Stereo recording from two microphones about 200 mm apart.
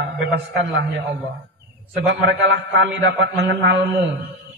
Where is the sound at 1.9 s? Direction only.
60° right (ahead or behind).